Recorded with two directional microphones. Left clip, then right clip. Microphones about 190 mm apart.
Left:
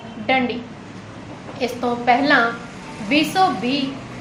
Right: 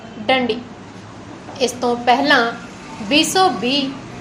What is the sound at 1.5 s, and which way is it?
A woman's voice, 30° right (ahead or behind).